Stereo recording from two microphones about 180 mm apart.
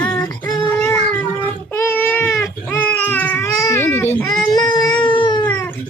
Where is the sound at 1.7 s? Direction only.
10° left (ahead or behind).